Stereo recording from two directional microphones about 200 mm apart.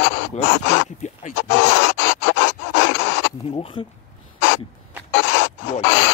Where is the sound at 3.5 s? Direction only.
30° left (ahead or behind).